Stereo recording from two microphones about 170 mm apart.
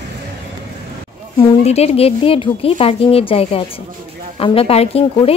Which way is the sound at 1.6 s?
35° left (ahead or behind).